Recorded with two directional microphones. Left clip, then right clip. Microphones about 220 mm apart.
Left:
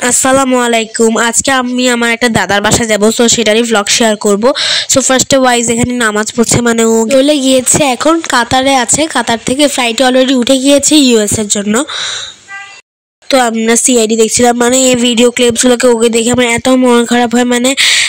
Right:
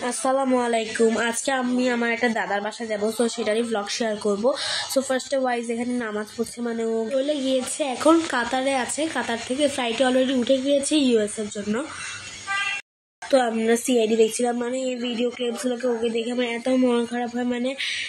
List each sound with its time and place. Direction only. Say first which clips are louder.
0.0 s speech: left 14 dB; 50° left (ahead or behind)
13.3 s speech: left 11 dB; 40° left (ahead or behind)